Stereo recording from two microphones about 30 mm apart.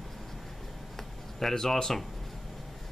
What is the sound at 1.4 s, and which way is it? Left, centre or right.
Speech, centre.